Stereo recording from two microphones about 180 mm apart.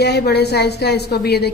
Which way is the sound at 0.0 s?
65° left (ahead or behind).